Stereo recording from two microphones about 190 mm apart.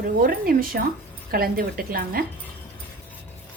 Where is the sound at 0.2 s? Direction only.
50° right (ahead or behind).